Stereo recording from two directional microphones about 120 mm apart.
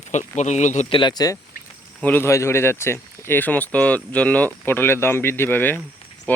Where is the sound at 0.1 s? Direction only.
75° left (ahead or behind).